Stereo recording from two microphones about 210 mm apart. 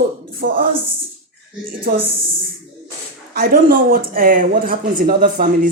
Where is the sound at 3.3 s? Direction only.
45° right (ahead or behind).